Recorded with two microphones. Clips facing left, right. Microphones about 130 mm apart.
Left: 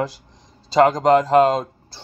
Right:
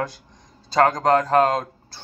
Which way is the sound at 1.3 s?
Centre (ahead or behind).